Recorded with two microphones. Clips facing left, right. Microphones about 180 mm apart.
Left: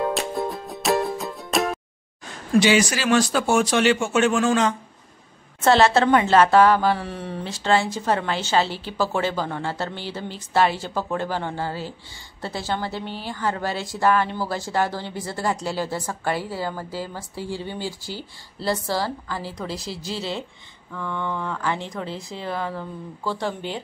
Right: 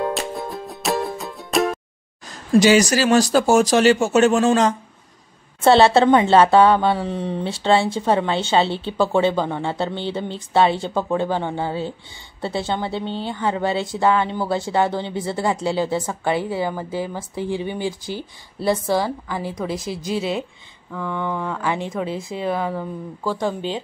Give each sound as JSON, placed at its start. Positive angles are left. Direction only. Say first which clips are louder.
{"t": 0.0, "sound": "music", "louder": "even", "side_deg": 0}
{"t": 2.2, "sound": "a woman's voice", "louder": "right 4 dB", "side_deg": -40}